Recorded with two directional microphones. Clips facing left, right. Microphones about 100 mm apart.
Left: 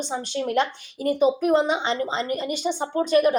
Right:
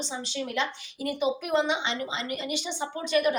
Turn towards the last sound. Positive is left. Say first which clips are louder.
# left 6 dB
turn(degrees=40)  # may be behind; listen again after turning